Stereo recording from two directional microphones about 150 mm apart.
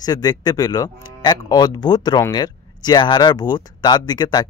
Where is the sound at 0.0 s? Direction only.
25° left (ahead or behind).